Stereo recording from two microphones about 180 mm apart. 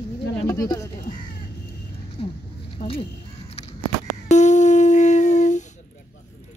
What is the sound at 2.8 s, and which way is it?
Crow, 30° left (ahead or behind).